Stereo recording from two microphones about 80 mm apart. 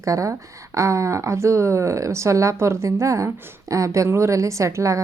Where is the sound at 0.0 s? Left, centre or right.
Right.